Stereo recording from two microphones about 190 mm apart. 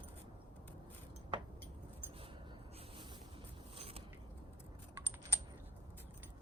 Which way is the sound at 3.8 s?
30° right (ahead or behind).